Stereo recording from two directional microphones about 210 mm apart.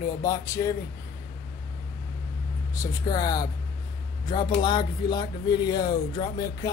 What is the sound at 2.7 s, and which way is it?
Speech, 15° left (ahead or behind).